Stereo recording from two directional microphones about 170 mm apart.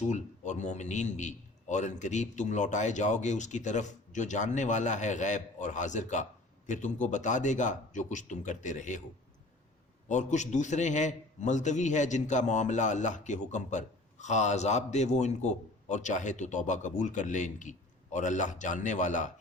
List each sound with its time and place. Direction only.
0.1 s a man's voice: 45° left (ahead or behind)
10.1 s a man's voice: 45° left (ahead or behind)